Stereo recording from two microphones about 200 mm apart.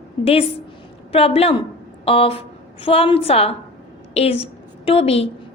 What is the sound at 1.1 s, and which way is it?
A woman's voice, 30° left (ahead or behind).